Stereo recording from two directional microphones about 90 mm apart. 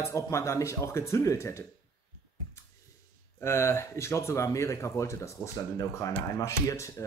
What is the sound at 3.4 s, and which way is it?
Speech, 30° left (ahead or behind).